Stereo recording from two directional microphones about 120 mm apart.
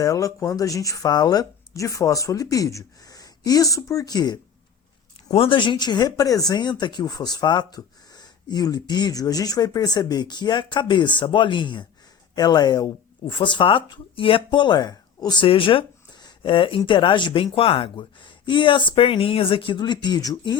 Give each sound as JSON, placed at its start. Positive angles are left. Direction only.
{"t": 0.0, "sound": "speech", "side_deg": 30}
{"t": 5.3, "sound": "speech", "side_deg": 50}
{"t": 15.4, "sound": "speech", "side_deg": 50}